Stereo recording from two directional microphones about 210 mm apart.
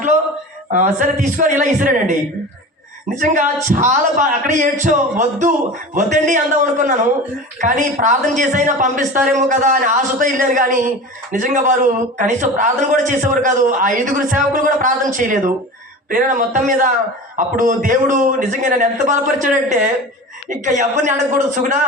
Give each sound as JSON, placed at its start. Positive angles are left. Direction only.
{"t": 0.7, "sound": "speech", "side_deg": -35}
{"t": 3.2, "sound": "speech", "side_deg": -40}